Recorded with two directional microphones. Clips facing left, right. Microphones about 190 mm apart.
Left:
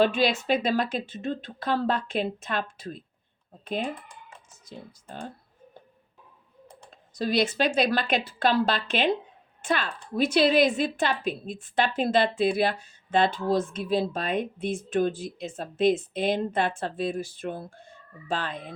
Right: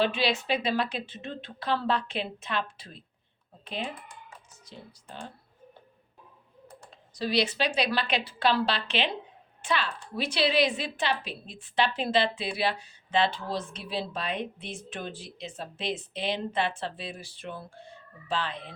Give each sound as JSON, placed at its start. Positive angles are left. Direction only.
{"t": 0.0, "sound": "a woman's voice", "side_deg": 45}
{"t": 7.2, "sound": "a woman's voice", "side_deg": 50}